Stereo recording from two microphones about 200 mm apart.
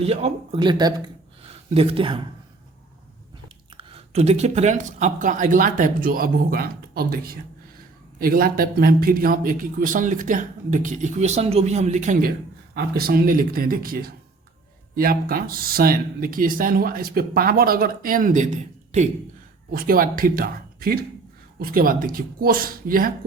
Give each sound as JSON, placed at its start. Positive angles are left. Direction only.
{"t": 0.0, "sound": "speech", "side_deg": -30}
{"t": 3.8, "sound": "speech", "side_deg": -25}